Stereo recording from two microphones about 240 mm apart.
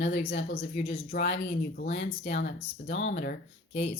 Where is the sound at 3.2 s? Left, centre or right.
Left.